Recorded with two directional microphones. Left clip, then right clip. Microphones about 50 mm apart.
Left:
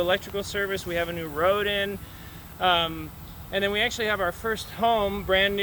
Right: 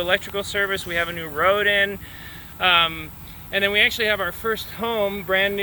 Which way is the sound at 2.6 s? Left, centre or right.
Left.